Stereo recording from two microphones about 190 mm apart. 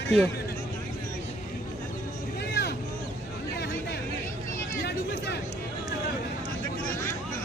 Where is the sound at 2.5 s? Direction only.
60° left (ahead or behind).